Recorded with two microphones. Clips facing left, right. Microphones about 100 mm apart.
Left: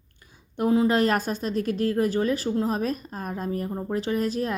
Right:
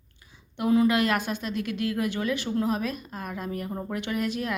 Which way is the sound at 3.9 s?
35° left (ahead or behind).